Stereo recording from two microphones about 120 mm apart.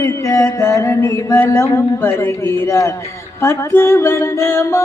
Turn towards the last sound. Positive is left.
turn(degrees=25)  # may be behind; listen again after turning